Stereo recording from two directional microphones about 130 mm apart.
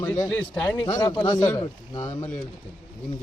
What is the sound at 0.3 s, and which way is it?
Speech, 10° left (ahead or behind).